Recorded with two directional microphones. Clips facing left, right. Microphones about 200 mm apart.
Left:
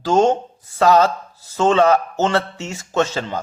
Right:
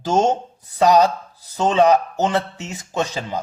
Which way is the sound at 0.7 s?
15° right (ahead or behind).